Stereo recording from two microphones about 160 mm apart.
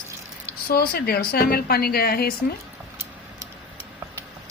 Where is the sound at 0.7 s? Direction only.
70° left (ahead or behind).